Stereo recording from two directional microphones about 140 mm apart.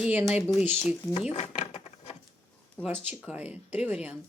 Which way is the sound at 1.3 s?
55° left (ahead or behind).